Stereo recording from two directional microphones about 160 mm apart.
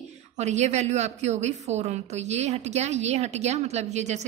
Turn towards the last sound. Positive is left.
turn(degrees=-45)  # may be behind; listen again after turning